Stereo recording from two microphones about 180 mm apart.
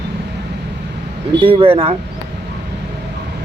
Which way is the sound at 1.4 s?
30° right (ahead or behind).